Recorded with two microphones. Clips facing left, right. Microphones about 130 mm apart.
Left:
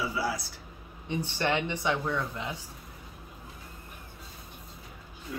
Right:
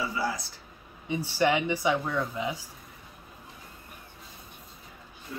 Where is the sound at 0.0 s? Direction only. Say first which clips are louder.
Even; 10° left (ahead or behind).